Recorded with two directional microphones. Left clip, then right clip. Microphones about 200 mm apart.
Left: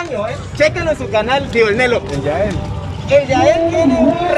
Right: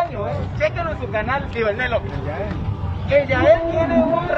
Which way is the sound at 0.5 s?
40° left (ahead or behind).